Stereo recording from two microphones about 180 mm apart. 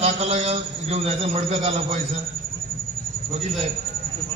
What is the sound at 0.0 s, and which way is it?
A man's voice, 35° right (ahead or behind).